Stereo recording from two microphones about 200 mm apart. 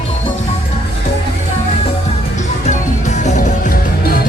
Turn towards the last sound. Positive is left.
turn(degrees=45)  # may be behind; listen again after turning